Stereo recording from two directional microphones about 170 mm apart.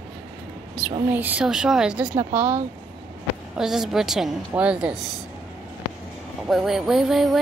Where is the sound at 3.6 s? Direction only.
5° right (ahead or behind).